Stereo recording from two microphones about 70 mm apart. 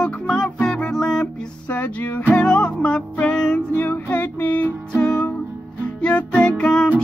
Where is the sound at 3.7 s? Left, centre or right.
Left.